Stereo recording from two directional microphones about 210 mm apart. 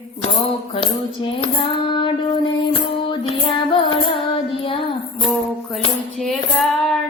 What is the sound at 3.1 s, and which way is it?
Music, 25° left (ahead or behind).